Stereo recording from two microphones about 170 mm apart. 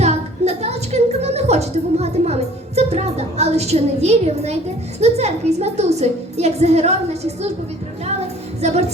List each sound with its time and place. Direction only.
0.0 s a woman's voice: 40° right (ahead or behind)
8.6 s a woman's voice: 40° right (ahead or behind)